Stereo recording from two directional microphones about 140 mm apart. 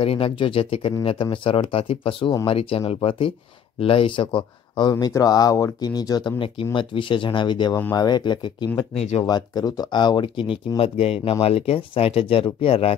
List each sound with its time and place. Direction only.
0.0 s speech: 40° left (ahead or behind)
4.9 s speech: 25° left (ahead or behind)
8.9 s speech: 50° left (ahead or behind)
9.2 s speech: 30° left (ahead or behind)